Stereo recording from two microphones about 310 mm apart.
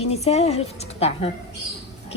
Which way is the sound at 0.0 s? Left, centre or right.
Centre.